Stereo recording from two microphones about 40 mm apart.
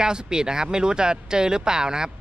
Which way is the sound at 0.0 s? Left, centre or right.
Centre.